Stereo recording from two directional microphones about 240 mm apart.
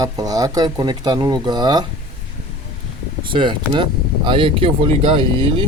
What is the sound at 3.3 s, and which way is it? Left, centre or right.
Speech, centre.